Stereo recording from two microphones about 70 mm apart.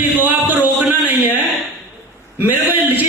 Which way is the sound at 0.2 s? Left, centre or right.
Right.